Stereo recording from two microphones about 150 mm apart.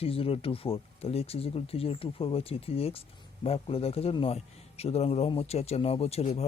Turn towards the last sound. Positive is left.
turn(degrees=45)  # may be behind; listen again after turning